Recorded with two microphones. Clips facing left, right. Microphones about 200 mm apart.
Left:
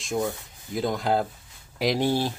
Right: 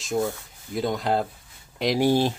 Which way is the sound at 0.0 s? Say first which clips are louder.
Right 2 dB; centre (ahead or behind).